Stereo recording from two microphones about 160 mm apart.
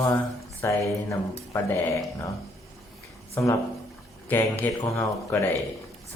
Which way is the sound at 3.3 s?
20° left (ahead or behind).